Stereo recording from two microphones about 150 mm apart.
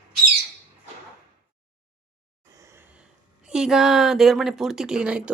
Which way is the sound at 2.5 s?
20° right (ahead or behind).